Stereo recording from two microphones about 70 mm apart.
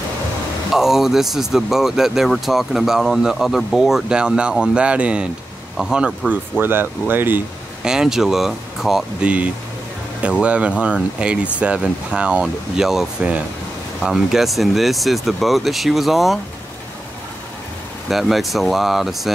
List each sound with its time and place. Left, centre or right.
0.7 s speech: centre
6.6 s speech: right
7.8 s speech: centre
9.2 s speech: centre
18.1 s speech: centre